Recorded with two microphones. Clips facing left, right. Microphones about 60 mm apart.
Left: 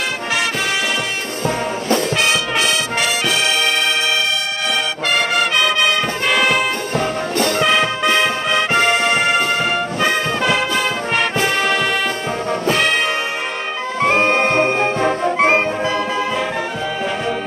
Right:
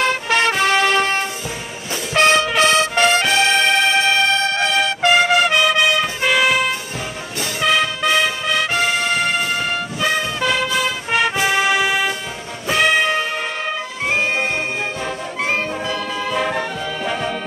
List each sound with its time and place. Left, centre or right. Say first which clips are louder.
0.0 s music: right 3 dB; right
2.1 s music: right 3 dB; right
5.0 s music: right 4 dB; centre
8.7 s music: left 4 dB; left
10.0 s music: left 1 dB; centre
10.8 s music: left 1 dB; centre
12.7 s brass instrument: right 6 dB; centre
14.0 s brass instrument: left 5 dB; left
15.8 s music: left 4 dB; centre